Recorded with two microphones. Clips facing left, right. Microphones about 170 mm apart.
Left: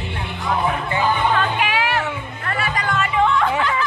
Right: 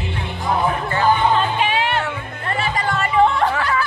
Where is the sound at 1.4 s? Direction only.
25° right (ahead or behind).